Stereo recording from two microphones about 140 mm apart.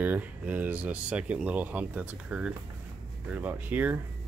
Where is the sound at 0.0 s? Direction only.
10° right (ahead or behind).